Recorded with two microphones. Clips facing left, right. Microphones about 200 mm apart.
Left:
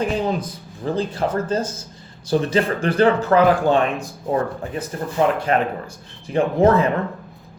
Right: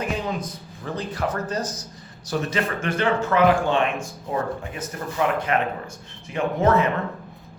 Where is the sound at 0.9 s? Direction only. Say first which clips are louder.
Left 5 dB; 30° left (ahead or behind).